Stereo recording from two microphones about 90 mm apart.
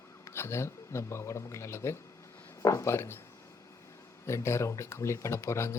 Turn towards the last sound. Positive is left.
turn(degrees=30)  # may be behind; listen again after turning